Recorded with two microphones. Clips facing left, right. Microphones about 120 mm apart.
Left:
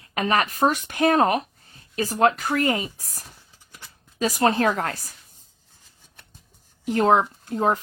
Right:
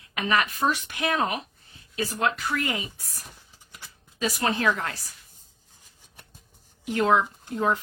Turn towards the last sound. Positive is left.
turn(degrees=40)  # may be behind; listen again after turning